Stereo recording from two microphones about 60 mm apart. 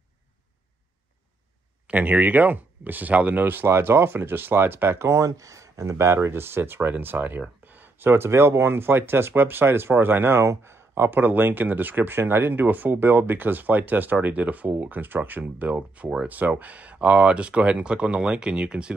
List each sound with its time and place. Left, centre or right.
1.9 s speech: right
11.1 s speech: right; by 18.9 s centre